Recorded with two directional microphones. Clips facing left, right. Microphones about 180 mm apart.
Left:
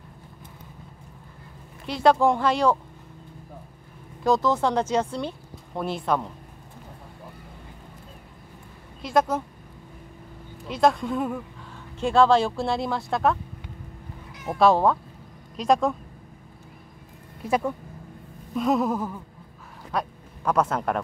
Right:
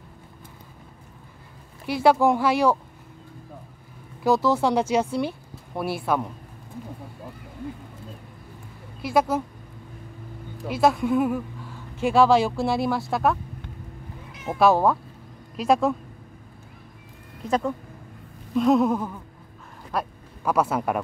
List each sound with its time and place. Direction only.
1.9 s speech: 5° right (ahead or behind)
4.2 s speech: 5° right (ahead or behind)
9.0 s speech: 5° right (ahead or behind)
10.7 s speech: 5° right (ahead or behind)
14.5 s speech: 5° right (ahead or behind)
17.5 s speech: 10° left (ahead or behind); by 21.0 s 10° right (ahead or behind)